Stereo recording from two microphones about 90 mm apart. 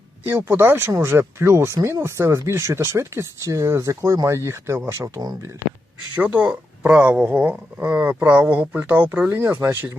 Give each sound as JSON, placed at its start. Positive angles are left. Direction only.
{"t": 0.3, "sound": "speech", "side_deg": -25}
{"t": 6.1, "sound": "speech", "side_deg": -15}